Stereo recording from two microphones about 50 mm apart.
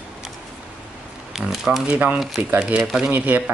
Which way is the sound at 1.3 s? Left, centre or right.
Centre.